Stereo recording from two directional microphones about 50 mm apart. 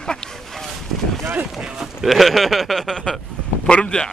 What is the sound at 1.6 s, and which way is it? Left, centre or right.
Speech, centre.